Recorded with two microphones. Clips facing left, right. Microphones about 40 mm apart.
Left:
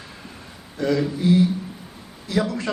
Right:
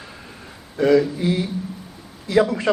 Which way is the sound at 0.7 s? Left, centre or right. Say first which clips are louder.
Right 7 dB; right.